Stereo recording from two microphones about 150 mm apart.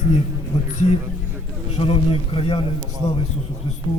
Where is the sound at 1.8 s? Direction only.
35° left (ahead or behind).